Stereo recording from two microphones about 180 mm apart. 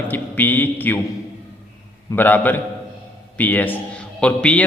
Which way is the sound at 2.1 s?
10° left (ahead or behind).